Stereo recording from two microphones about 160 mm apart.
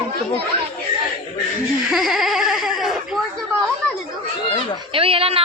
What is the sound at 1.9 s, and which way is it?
Speech, centre (ahead or behind).